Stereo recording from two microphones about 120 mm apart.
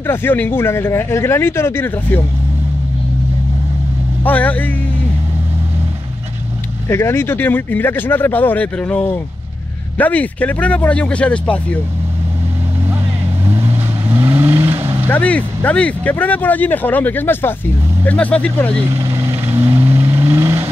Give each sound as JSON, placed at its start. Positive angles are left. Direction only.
{"t": 0.0, "sound": "speech", "side_deg": 20}
{"t": 4.2, "sound": "speech", "side_deg": 15}
{"t": 6.9, "sound": "speech", "side_deg": 20}
{"t": 13.5, "sound": "vehicle", "side_deg": -25}
{"t": 15.0, "sound": "speech", "side_deg": 10}
{"t": 18.8, "sound": "vehicle", "side_deg": -25}